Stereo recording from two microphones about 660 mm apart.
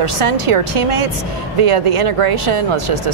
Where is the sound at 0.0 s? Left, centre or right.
Right.